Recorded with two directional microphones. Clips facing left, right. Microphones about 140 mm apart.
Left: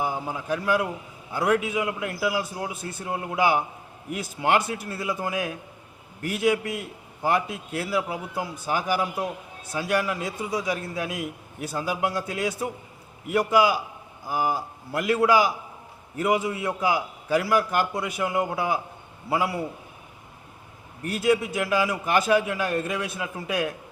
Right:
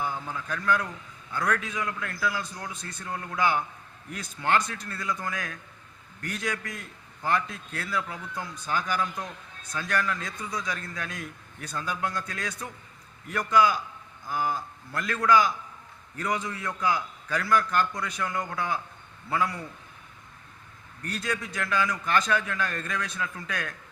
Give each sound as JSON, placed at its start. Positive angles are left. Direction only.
{"t": 0.0, "sound": "a man's voice", "side_deg": 10}
{"t": 0.8, "sound": "a man's voice", "side_deg": 20}
{"t": 3.1, "sound": "speech", "side_deg": 20}
{"t": 3.3, "sound": "a man's voice", "side_deg": 10}
{"t": 18.0, "sound": "speech", "side_deg": 20}
{"t": 21.0, "sound": "a man's voice", "side_deg": 10}